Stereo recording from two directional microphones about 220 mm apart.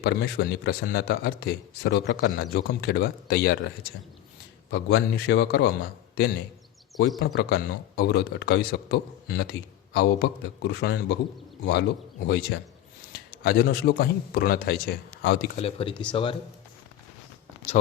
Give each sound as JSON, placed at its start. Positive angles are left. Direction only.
{"t": 0.0, "sound": "a man's voice", "side_deg": 45}
{"t": 4.7, "sound": "a man's voice", "side_deg": 50}
{"t": 7.2, "sound": "a man's voice", "side_deg": 45}
{"t": 15.5, "sound": "speech", "side_deg": 25}